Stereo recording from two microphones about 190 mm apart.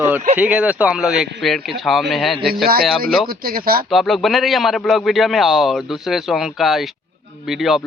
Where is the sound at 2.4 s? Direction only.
55° right (ahead or behind).